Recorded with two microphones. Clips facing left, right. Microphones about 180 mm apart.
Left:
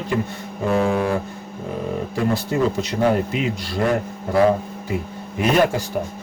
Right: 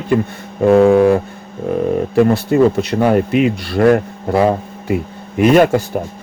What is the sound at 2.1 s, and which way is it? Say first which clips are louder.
Speech: right 9 dB; 60° right (ahead or behind).